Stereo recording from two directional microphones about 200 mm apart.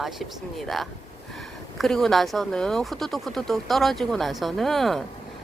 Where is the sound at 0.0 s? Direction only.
Centre (ahead or behind).